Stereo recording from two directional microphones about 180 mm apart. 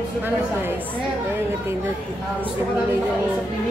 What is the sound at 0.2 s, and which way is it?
Speech, 10° right (ahead or behind).